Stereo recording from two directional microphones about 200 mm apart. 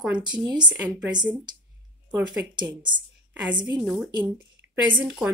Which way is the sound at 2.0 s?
5° right (ahead or behind).